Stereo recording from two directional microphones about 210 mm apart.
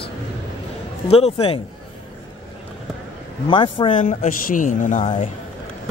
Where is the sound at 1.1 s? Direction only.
30° left (ahead or behind).